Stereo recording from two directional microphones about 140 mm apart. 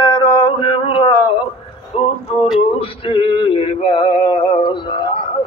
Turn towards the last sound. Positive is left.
turn(degrees=35)  # may be behind; listen again after turning